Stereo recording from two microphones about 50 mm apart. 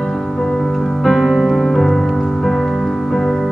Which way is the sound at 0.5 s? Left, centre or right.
Centre.